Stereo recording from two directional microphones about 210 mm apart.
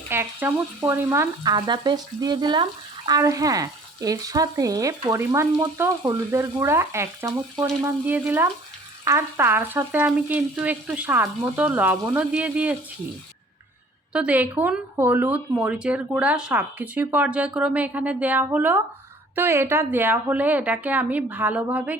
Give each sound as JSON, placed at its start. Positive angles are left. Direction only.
{"t": 0.1, "sound": "frying", "side_deg": -10}
{"t": 3.1, "sound": "speech", "side_deg": -15}
{"t": 14.1, "sound": "speech", "side_deg": -5}